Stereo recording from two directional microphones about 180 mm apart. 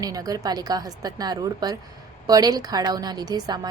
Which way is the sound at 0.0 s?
20° right (ahead or behind).